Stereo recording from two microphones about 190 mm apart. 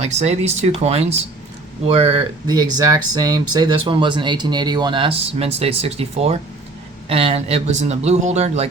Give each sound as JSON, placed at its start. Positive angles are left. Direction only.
{"t": 0.0, "sound": "speech", "side_deg": -35}